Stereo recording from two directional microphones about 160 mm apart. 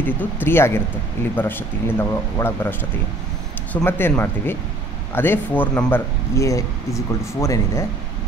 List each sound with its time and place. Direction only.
0.0 s speech: 10° left (ahead or behind)
3.7 s speech: 15° left (ahead or behind)